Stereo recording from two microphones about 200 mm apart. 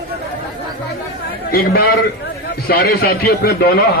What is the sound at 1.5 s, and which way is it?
A man's voice, 50° left (ahead or behind).